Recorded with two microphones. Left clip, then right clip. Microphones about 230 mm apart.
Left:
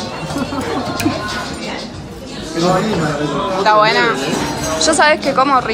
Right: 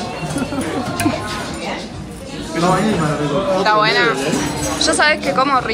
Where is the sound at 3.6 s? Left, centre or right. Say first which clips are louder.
Left 4 dB; centre.